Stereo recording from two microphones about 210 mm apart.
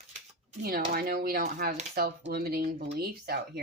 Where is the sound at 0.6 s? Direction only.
45° right (ahead or behind).